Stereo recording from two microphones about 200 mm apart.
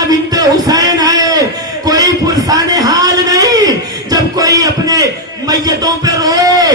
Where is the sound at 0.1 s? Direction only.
20° right (ahead or behind).